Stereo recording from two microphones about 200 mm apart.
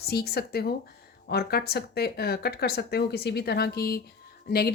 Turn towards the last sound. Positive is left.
turn(degrees=50)  # may be behind; listen again after turning